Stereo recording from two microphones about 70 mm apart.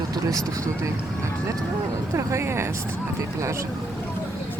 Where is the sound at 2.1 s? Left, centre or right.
Right.